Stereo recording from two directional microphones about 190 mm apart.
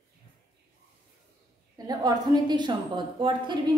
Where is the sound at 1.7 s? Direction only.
20° right (ahead or behind).